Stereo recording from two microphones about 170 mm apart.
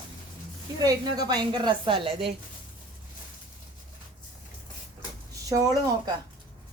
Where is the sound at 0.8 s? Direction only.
25° right (ahead or behind).